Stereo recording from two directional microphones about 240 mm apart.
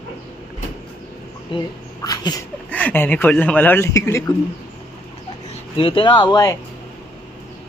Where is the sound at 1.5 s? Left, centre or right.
Centre.